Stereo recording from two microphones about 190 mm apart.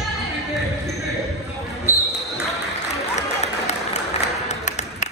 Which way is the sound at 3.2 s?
35° left (ahead or behind).